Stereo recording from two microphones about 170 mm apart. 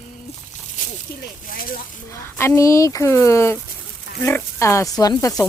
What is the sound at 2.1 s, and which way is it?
Speech, 15° left (ahead or behind).